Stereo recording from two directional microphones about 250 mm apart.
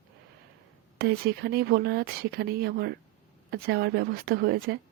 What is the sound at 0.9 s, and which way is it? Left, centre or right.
Speech, right.